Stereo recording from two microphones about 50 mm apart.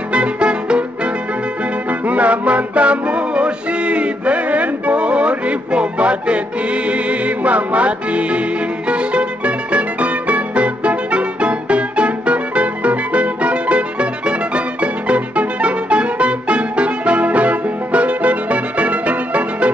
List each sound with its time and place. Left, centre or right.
0.1 s music: right